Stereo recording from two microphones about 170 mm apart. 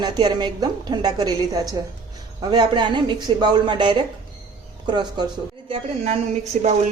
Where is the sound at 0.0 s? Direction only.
25° right (ahead or behind).